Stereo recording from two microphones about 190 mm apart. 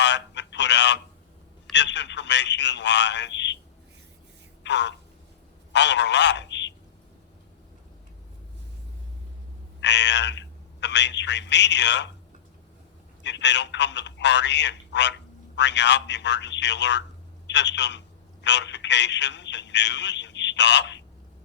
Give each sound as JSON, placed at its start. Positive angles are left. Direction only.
{"t": 0.0, "sound": "a sound", "side_deg": 65}
{"t": 1.7, "sound": "speech", "side_deg": 65}
{"t": 4.6, "sound": "speech", "side_deg": 65}
{"t": 9.8, "sound": "speech", "side_deg": 65}
{"t": 13.2, "sound": "speech", "side_deg": 65}